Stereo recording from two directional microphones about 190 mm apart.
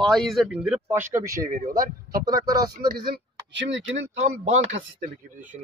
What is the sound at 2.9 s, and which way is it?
Speech, 65° right (ahead or behind).